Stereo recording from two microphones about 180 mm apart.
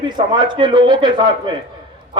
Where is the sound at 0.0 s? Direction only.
25° right (ahead or behind).